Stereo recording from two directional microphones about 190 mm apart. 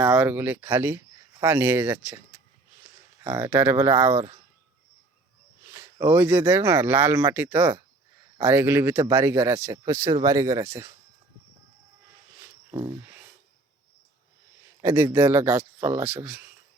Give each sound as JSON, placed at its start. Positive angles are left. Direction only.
{"t": 0.0, "sound": "speech", "side_deg": -5}
{"t": 3.2, "sound": "speech", "side_deg": -10}
{"t": 5.6, "sound": "speech", "side_deg": -15}
{"t": 12.7, "sound": "a sound", "side_deg": -20}
{"t": 14.8, "sound": "speech", "side_deg": -15}